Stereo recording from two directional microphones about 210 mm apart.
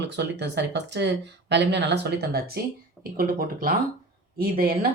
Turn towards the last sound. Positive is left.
turn(degrees=-45)  # may be behind; listen again after turning